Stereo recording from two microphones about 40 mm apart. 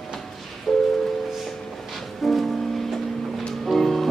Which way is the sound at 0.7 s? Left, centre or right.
Centre.